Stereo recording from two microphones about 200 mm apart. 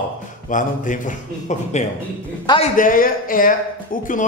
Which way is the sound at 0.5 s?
40° left (ahead or behind).